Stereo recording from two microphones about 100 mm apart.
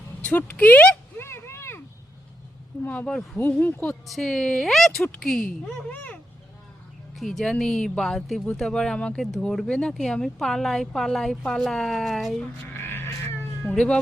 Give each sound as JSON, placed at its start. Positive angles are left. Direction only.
{"t": 0.2, "sound": "speech", "side_deg": 15}
{"t": 1.2, "sound": "a sound", "side_deg": 25}
{"t": 2.8, "sound": "speech", "side_deg": 20}
{"t": 3.8, "sound": "speech", "side_deg": 0}
{"t": 7.2, "sound": "speech", "side_deg": 0}
{"t": 12.6, "sound": "cat", "side_deg": 20}
{"t": 13.7, "sound": "speech", "side_deg": 10}